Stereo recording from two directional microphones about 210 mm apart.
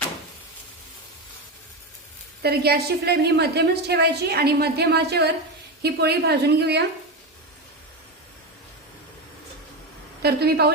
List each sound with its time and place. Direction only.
2.4 s a woman's voice: 50° right (ahead or behind)
10.2 s a woman's voice: 50° right (ahead or behind)